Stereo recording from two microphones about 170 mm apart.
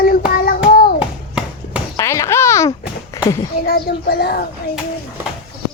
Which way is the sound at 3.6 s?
65° left (ahead or behind).